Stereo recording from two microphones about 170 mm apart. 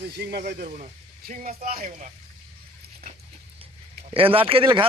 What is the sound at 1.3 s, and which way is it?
Speech, 45° right (ahead or behind).